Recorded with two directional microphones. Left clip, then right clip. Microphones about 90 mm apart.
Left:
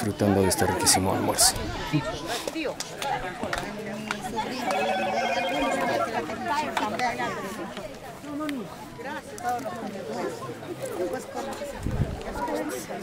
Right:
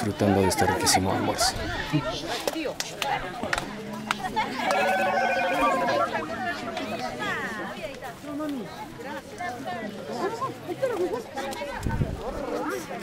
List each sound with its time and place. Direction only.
0.0 s speech: centre (ahead or behind)
3.0 s speech: 10° right (ahead or behind)
4.1 s telephone bell ringing: 15° right (ahead or behind)